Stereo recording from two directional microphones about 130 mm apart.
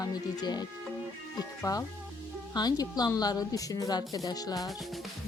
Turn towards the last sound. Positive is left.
turn(degrees=30)  # may be behind; listen again after turning